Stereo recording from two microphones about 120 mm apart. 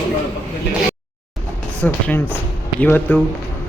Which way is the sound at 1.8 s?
15° left (ahead or behind).